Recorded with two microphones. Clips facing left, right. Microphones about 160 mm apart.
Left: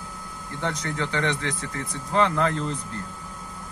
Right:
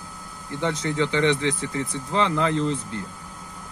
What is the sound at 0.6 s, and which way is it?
Speech, 25° right (ahead or behind).